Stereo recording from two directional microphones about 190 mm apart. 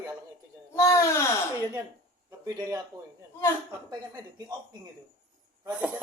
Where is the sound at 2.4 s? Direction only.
20° right (ahead or behind).